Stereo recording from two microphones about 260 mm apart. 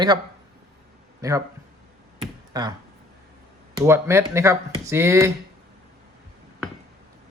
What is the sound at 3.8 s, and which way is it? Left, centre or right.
Speech, centre.